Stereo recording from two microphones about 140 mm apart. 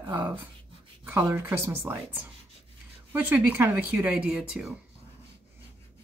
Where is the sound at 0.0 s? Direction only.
15° right (ahead or behind).